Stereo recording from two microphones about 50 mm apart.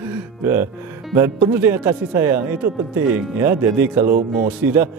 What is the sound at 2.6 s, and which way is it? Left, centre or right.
Speech, right.